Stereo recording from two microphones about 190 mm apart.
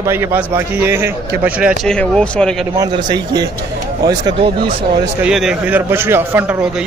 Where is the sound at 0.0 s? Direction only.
10° right (ahead or behind).